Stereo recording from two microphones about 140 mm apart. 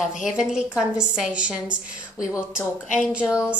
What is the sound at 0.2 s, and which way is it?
A woman's voice, 5° right (ahead or behind).